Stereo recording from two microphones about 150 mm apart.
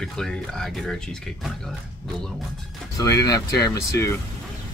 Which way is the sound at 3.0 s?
25° left (ahead or behind).